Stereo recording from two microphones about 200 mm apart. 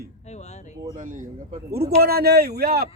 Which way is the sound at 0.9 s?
40° right (ahead or behind).